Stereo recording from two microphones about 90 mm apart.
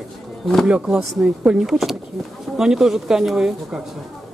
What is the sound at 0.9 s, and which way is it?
A woman's voice, 10° right (ahead or behind).